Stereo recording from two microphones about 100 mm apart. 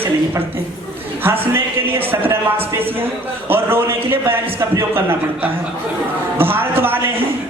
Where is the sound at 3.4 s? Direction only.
20° right (ahead or behind).